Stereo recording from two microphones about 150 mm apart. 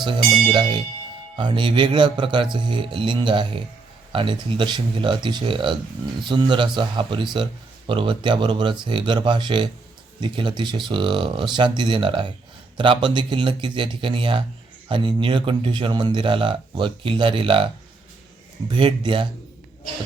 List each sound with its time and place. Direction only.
0.0 s speech: 35° right (ahead or behind)
18.7 s speech: 35° right (ahead or behind)